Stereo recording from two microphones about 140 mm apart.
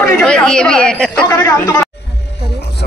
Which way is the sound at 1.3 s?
25° left (ahead or behind).